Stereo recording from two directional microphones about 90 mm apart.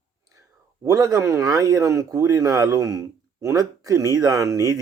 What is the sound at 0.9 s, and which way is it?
Speech, 40° right (ahead or behind).